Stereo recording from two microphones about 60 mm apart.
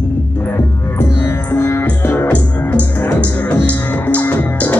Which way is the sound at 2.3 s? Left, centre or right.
Left.